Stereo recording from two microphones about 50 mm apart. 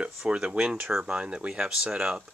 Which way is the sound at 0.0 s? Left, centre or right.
Centre.